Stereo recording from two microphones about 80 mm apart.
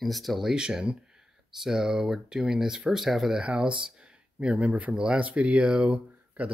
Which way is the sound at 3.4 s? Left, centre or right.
Centre.